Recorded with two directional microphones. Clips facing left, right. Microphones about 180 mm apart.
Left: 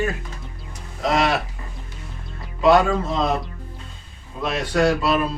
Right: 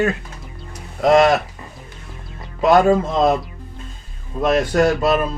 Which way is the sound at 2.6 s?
45° right (ahead or behind).